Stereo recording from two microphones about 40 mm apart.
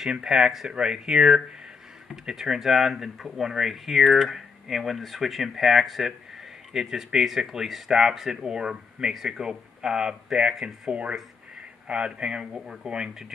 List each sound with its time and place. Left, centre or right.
0.0 s speech: centre